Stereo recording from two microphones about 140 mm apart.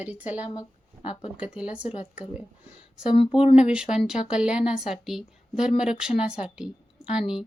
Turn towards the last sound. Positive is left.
turn(degrees=-5)  # may be behind; listen again after turning